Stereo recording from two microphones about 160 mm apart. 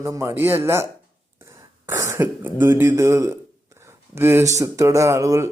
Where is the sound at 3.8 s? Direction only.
15° right (ahead or behind).